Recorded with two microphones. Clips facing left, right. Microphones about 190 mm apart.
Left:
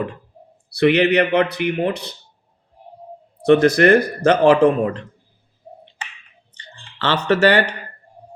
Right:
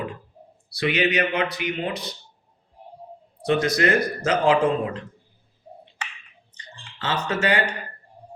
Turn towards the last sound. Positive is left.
turn(degrees=70)  # may be behind; listen again after turning